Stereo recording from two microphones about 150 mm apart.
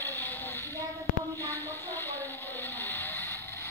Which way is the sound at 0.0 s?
15° left (ahead or behind).